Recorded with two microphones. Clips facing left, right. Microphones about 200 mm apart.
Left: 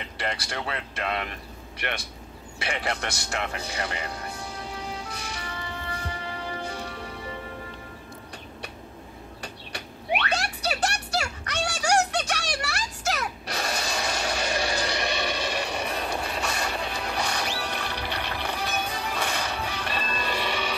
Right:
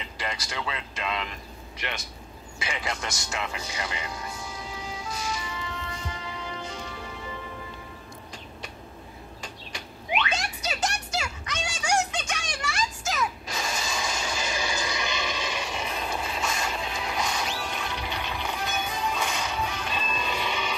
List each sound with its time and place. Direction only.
0.2 s speech: 60° left (ahead or behind)
4.4 s music: 60° left (ahead or behind)
9.4 s a sound: 65° left (ahead or behind)
18.9 s music: 65° left (ahead or behind)